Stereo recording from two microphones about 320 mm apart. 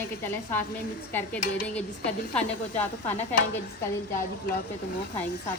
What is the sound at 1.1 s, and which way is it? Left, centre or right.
Speech, centre.